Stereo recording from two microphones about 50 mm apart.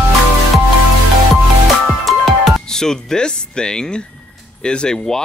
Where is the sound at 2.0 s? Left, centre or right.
Centre.